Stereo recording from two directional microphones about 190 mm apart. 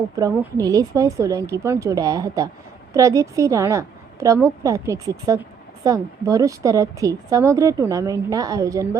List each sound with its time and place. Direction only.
0.2 s a woman's voice: 20° right (ahead or behind)